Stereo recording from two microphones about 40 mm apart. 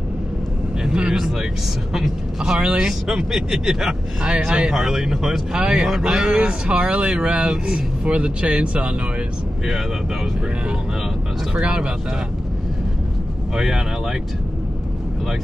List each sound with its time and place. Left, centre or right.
2.0 s a man's voice: centre
2.6 s speech: right
2.9 s a man's voice: centre
4.7 s a man's voice: centre
5.5 s speech: right
5.8 s a man's voice: centre
6.7 s speech: right
11.6 s speech: right
13.6 s a man's voice: centre